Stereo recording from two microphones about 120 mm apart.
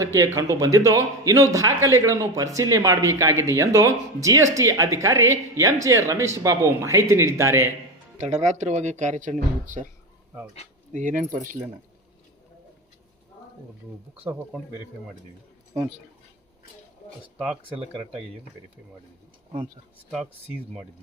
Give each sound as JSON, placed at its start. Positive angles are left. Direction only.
{"t": 0.0, "sound": "a woman's voice", "side_deg": -25}
{"t": 8.2, "sound": "speech", "side_deg": -75}
{"t": 10.9, "sound": "speech", "side_deg": -90}